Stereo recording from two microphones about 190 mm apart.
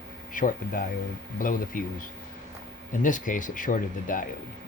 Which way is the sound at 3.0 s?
45° left (ahead or behind).